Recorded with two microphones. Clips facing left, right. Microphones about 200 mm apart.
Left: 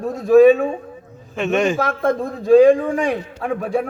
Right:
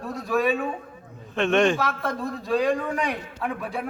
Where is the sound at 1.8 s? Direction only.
50° left (ahead or behind).